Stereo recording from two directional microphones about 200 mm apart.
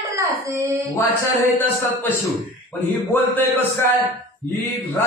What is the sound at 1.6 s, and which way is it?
Speech, 10° left (ahead or behind).